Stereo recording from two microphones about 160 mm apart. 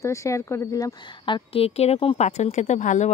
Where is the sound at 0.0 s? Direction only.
20° left (ahead or behind).